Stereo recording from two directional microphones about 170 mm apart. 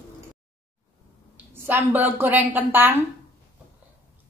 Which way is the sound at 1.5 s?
10° right (ahead or behind).